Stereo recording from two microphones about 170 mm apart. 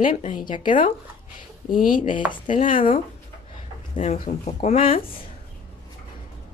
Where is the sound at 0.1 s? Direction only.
45° left (ahead or behind).